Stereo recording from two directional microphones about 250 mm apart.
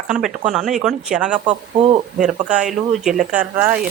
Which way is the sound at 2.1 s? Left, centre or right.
Centre.